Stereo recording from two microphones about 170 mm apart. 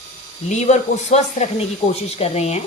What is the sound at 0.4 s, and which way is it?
Speech, 45° left (ahead or behind).